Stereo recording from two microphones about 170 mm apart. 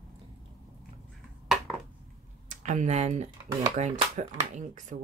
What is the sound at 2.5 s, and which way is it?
Speech, 45° right (ahead or behind).